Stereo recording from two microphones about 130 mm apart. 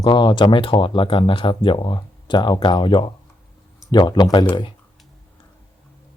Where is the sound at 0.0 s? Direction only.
35° left (ahead or behind).